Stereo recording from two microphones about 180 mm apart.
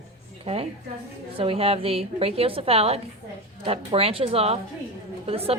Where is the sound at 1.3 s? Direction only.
30° right (ahead or behind).